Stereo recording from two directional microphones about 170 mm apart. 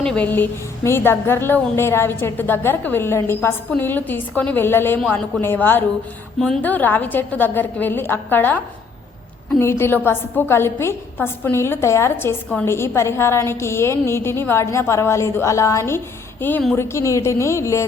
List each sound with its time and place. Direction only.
0.0 s a woman's voice: 5° left (ahead or behind)